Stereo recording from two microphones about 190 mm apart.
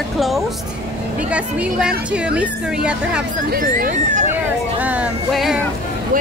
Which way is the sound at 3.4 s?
50° right (ahead or behind).